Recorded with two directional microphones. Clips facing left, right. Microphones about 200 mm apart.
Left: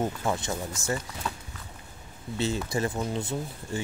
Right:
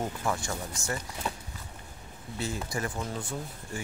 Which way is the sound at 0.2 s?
20° left (ahead or behind).